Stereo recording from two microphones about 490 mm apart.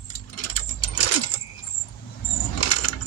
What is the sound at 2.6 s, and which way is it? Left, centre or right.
Keys jangling, left.